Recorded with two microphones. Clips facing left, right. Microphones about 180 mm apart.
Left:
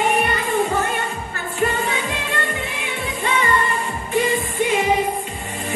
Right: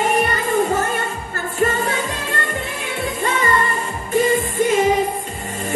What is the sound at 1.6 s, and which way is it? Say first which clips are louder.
Music: right 2 dB; 45° right (ahead or behind).